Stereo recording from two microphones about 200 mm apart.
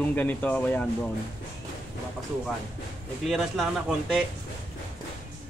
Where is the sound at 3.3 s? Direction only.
Centre (ahead or behind).